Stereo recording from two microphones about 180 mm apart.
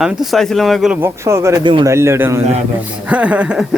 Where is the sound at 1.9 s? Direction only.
15° right (ahead or behind).